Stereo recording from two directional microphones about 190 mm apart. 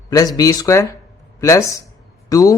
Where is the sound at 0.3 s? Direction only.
20° left (ahead or behind).